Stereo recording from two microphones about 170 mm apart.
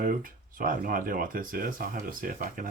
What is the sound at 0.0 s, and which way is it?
Speech, 55° right (ahead or behind).